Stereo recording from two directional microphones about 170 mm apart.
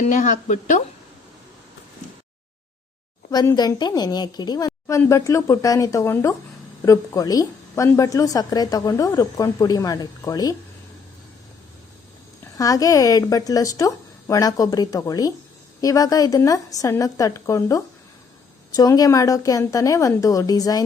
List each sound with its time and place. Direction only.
0.0 s speech: 45° left (ahead or behind)
3.3 s a woman's voice: 25° left (ahead or behind)
12.5 s a woman's voice: 20° left (ahead or behind)